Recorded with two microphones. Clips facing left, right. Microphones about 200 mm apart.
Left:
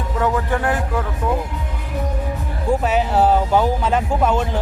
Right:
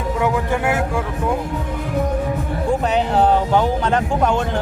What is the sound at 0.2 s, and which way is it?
Speech, 10° right (ahead or behind).